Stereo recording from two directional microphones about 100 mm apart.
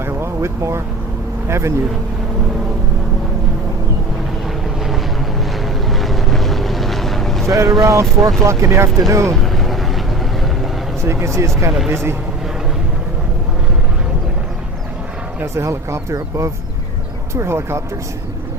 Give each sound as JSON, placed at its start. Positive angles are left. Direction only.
{"t": 0.0, "sound": "vehicle", "side_deg": -25}
{"t": 1.5, "sound": "speech", "side_deg": -25}
{"t": 5.6, "sound": "boat", "side_deg": 0}
{"t": 7.4, "sound": "speech", "side_deg": -30}
{"t": 9.3, "sound": "vehicle", "side_deg": 0}
{"t": 11.0, "sound": "speech", "side_deg": -25}
{"t": 15.4, "sound": "speech", "side_deg": -25}